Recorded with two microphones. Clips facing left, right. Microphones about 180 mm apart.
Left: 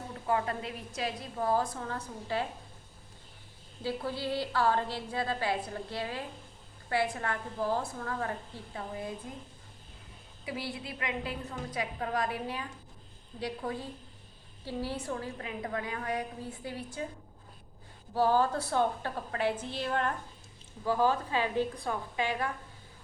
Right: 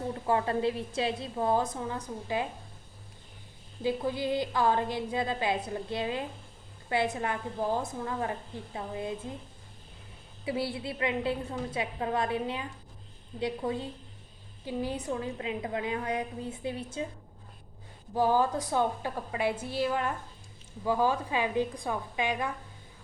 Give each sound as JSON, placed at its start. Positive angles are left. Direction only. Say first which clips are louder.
{"t": 0.3, "sound": "a woman's voice", "louder": "right 4 dB", "side_deg": -30}
{"t": 3.8, "sound": "a woman's voice", "louder": "right 4 dB", "side_deg": -15}
{"t": 10.4, "sound": "a woman's voice", "louder": "right 6 dB", "side_deg": -30}
{"t": 18.1, "sound": "a woman's voice", "louder": "right 1 dB", "side_deg": -15}